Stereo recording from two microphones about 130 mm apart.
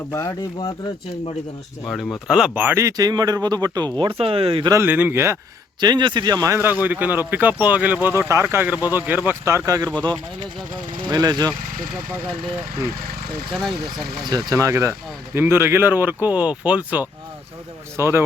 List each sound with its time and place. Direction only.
0.1 s speech: 25° left (ahead or behind)
1.9 s speech: centre (ahead or behind)
2.6 s speech: 20° right (ahead or behind); by 4.7 s 45° right (ahead or behind)
4.7 s speech: 15° right (ahead or behind)
5.8 s speech: 35° right (ahead or behind)
9.9 s speech: 10° left (ahead or behind)
11.0 s speech: 30° right (ahead or behind)
13.5 s speech: centre (ahead or behind)
14.3 s speech: 30° right (ahead or behind)